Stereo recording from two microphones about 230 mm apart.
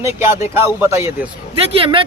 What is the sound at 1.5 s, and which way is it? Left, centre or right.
Speech, right.